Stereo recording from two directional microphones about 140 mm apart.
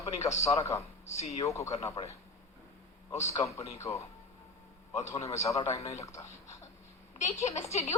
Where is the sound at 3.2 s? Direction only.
20° left (ahead or behind).